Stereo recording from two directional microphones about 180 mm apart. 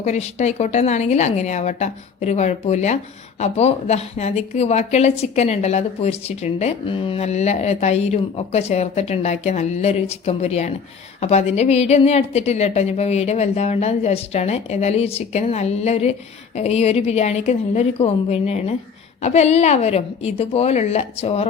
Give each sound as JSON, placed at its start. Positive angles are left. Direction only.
{"t": 0.0, "sound": "speech", "side_deg": 40}